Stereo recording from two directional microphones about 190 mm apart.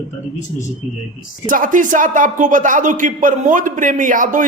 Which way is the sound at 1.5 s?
45° right (ahead or behind).